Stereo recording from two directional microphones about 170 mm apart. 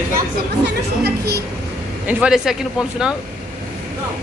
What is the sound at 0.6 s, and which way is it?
Speech, 75° right (ahead or behind).